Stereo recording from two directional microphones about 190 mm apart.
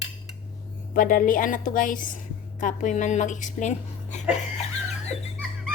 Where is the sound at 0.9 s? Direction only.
45° left (ahead or behind).